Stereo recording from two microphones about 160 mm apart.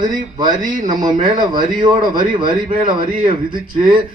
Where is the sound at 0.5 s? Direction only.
55° right (ahead or behind).